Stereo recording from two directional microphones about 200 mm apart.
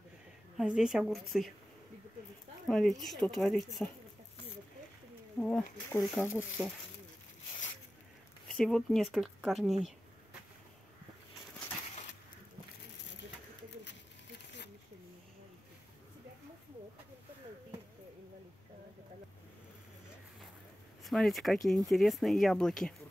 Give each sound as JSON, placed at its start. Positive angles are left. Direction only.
{"t": 0.6, "sound": "speech", "side_deg": -5}
{"t": 2.7, "sound": "speech", "side_deg": 0}
{"t": 5.4, "sound": "speech", "side_deg": 5}
{"t": 8.5, "sound": "speech", "side_deg": 0}
{"t": 21.0, "sound": "speech", "side_deg": 0}